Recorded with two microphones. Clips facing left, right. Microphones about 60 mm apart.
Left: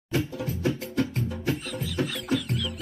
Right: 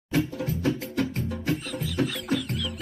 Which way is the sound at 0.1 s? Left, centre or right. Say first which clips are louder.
Right 2 dB; right.